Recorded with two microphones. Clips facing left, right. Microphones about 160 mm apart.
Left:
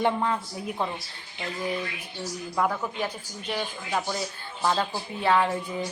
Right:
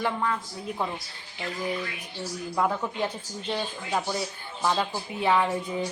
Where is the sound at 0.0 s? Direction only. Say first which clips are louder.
Left 3 dB; 20° left (ahead or behind).